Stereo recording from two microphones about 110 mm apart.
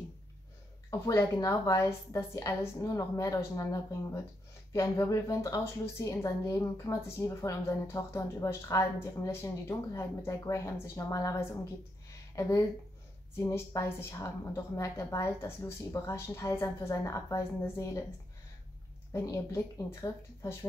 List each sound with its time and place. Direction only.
0.8 s speech: 30° left (ahead or behind)
19.1 s speech: 30° left (ahead or behind)